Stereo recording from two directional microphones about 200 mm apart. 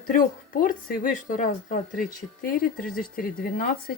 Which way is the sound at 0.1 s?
45° left (ahead or behind).